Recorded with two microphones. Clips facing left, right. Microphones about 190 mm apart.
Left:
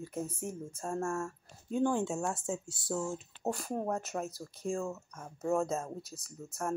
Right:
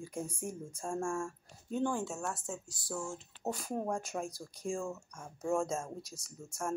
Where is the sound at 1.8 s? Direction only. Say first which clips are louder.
Left 5 dB; 25° left (ahead or behind).